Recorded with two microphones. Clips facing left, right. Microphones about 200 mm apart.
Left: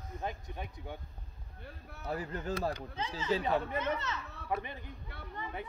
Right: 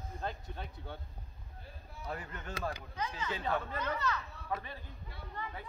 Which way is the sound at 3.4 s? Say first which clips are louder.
Left 3 dB; 20° left (ahead or behind).